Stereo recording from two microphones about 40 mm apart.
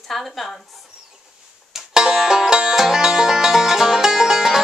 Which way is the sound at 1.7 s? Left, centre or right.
Centre.